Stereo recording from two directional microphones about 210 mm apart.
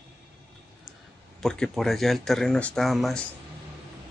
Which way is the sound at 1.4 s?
Centre (ahead or behind).